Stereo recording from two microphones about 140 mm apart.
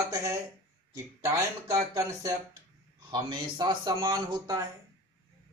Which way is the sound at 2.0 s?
20° right (ahead or behind).